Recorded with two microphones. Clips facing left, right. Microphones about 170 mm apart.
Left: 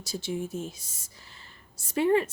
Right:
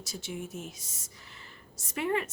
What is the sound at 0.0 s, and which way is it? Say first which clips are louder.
A woman's voice: left 6 dB; 30° left (ahead or behind).